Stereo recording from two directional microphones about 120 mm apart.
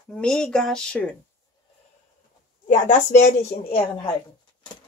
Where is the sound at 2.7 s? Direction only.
80° left.